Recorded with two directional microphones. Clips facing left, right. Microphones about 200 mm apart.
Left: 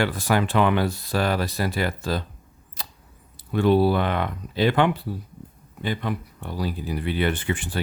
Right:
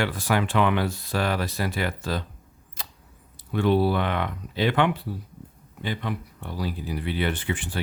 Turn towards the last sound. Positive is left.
turn(degrees=45)  # may be behind; listen again after turning